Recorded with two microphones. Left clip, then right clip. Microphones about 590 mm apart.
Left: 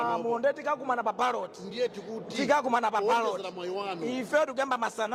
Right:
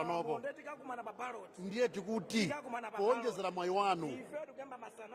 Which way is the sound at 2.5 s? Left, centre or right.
Left.